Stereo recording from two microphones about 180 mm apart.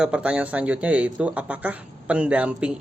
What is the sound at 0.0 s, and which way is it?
Speech, 5° right (ahead or behind).